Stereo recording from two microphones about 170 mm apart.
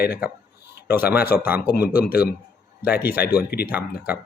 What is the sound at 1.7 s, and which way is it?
Speech, 65° left (ahead or behind).